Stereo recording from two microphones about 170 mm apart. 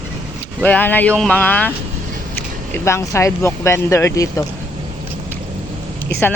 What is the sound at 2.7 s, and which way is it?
Speech, 15° left (ahead or behind).